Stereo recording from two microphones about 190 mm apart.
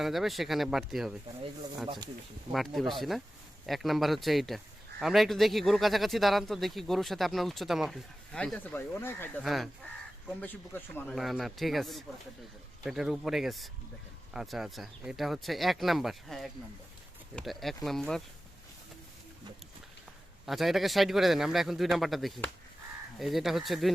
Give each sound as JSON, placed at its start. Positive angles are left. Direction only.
{"t": 0.0, "sound": "speech", "side_deg": 0}
{"t": 2.5, "sound": "speech", "side_deg": 0}
{"t": 9.4, "sound": "speech", "side_deg": 0}
{"t": 20.4, "sound": "speech", "side_deg": 0}